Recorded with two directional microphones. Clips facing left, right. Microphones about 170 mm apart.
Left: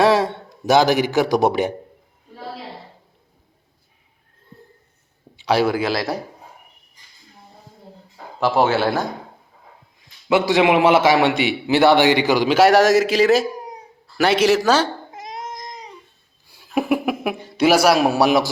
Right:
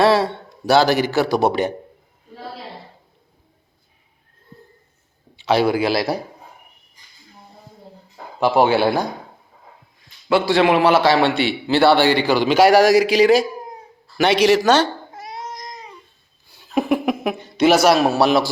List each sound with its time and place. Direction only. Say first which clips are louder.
0.0 s a man's voice: even; 15° left (ahead or behind)
5.5 s a man's voice: right 1 dB; 5° left (ahead or behind)
8.4 s a man's voice: right 2 dB; centre (ahead or behind)
10.2 s a man's voice: even; 20° left (ahead or behind)
12.5 s a man's voice: right 1 dB; centre (ahead or behind)
16.5 s a sound: right 1 dB; 10° left (ahead or behind)